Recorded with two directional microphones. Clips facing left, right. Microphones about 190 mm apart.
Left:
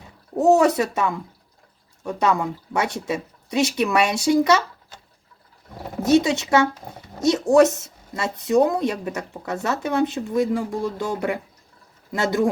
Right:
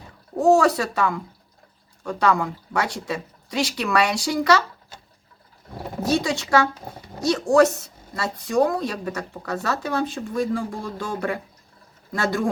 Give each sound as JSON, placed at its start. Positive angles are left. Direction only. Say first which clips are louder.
{"t": 0.3, "sound": "a woman's voice", "louder": "left 1 dB", "side_deg": 20}
{"t": 6.1, "sound": "a woman's voice", "louder": "left 5 dB", "side_deg": 20}